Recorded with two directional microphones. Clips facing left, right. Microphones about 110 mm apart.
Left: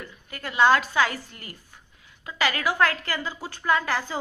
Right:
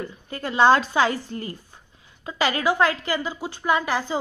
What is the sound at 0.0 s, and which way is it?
A woman's voice, 30° right (ahead or behind).